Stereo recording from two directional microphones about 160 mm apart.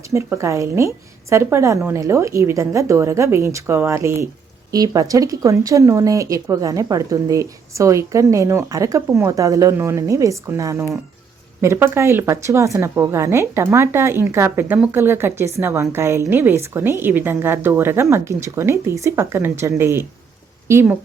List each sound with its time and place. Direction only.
0.1 s a woman's voice: 15° right (ahead or behind)